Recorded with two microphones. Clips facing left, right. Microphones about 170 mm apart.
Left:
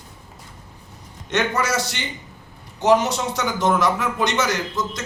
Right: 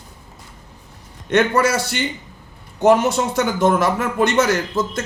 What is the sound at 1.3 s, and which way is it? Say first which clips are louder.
A man's voice: right 6 dB; 55° right (ahead or behind).